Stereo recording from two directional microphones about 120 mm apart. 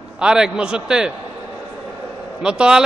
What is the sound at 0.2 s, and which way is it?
Speech, 5° right (ahead or behind).